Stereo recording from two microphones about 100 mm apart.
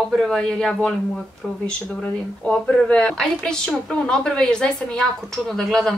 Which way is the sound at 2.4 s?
10° left (ahead or behind).